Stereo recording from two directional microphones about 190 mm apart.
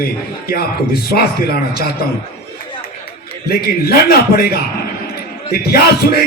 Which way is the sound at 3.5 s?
55° left (ahead or behind).